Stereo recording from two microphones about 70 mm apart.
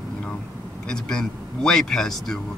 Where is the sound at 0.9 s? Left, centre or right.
Centre.